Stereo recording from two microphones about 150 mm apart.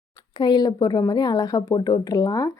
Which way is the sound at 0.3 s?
30° left (ahead or behind).